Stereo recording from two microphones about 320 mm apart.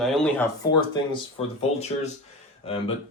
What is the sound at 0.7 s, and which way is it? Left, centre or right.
Speech, centre.